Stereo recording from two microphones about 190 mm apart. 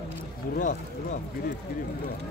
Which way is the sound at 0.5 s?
45° left (ahead or behind).